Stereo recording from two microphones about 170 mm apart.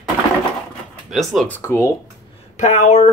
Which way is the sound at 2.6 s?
45° left (ahead or behind).